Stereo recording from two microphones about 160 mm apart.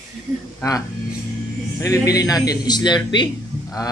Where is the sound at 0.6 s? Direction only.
20° left (ahead or behind).